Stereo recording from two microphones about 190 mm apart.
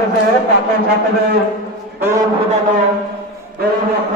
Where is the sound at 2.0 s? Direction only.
15° right (ahead or behind).